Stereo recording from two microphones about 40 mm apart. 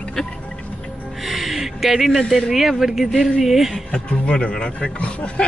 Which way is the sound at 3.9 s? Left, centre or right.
Left.